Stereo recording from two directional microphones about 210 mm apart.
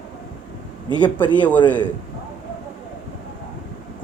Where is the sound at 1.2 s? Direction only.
10° left (ahead or behind).